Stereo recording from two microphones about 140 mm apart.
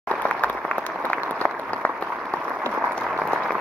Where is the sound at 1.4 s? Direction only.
10° left (ahead or behind).